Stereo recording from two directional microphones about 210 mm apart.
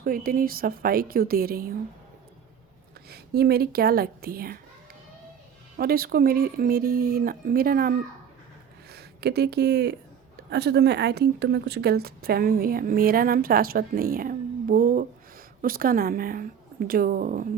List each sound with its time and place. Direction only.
0.0 s a woman's voice: 45° right (ahead or behind)
3.1 s a woman's voice: 50° right (ahead or behind)
5.7 s a woman's voice: 45° right (ahead or behind)